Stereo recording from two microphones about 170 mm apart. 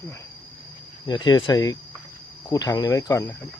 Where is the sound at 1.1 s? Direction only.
25° left (ahead or behind).